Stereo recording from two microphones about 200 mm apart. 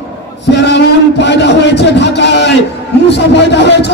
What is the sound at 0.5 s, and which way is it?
A man's voice, 60° left (ahead or behind).